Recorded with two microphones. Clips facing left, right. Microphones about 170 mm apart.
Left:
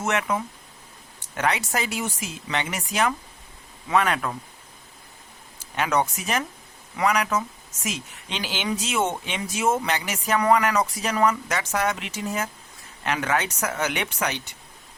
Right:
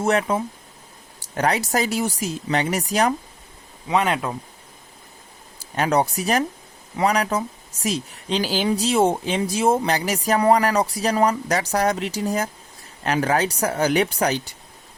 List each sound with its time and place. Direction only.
0.0 s speech: 30° right (ahead or behind)
3.8 s speech: 20° right (ahead or behind)
5.5 s speech: 35° right (ahead or behind)